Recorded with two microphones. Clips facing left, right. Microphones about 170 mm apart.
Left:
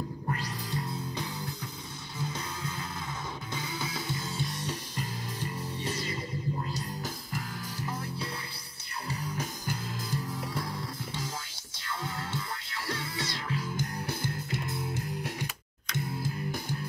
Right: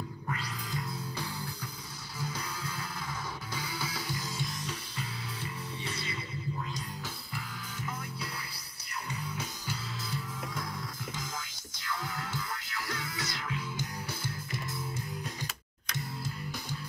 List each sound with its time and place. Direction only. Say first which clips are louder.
0.3 s music: left 2 dB; 35° left (ahead or behind)
1.1 s music: left 2 dB; 20° left (ahead or behind)
6.0 s music: left 4 dB; 40° left (ahead or behind)
13.7 s music: left 4 dB; 55° left (ahead or behind)